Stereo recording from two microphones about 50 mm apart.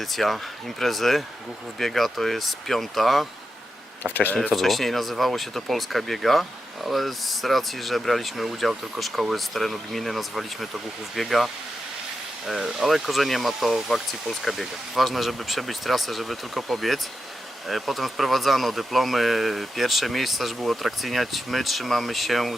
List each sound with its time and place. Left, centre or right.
0.1 s speech: centre
4.1 s speech: left
4.5 s speech: centre